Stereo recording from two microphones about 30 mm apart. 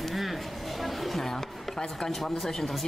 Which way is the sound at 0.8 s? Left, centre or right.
Centre.